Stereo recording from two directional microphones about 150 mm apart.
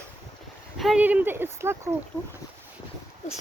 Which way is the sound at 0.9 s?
10° right (ahead or behind).